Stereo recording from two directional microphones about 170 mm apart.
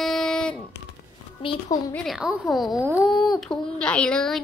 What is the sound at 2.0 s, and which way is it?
A woman's voice, centre (ahead or behind).